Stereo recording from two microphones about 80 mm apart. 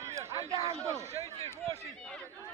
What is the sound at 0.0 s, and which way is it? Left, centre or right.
Speech, right.